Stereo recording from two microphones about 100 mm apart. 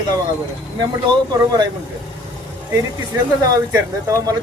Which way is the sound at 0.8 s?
45° right (ahead or behind).